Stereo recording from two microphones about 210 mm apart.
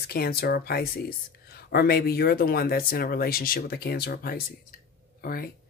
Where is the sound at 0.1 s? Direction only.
45° left (ahead or behind).